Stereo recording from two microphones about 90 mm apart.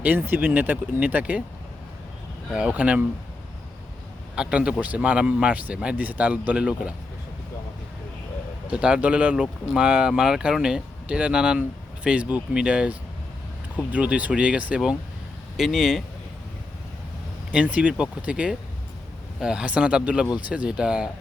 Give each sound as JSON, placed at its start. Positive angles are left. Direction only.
{"t": 0.0, "sound": "speech", "side_deg": -20}
{"t": 2.5, "sound": "speech", "side_deg": -10}
{"t": 4.4, "sound": "speech", "side_deg": -10}
{"t": 8.7, "sound": "speech", "side_deg": -10}
{"t": 15.5, "sound": "speech", "side_deg": 0}
{"t": 17.5, "sound": "speech", "side_deg": -15}